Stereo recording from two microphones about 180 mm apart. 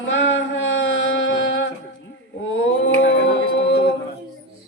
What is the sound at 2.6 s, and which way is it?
Singing, 90° left.